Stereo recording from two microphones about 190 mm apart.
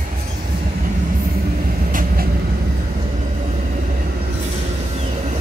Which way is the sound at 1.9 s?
45° right (ahead or behind).